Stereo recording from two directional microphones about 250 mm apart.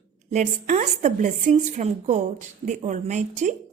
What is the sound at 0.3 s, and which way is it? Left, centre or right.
A woman's voice, right.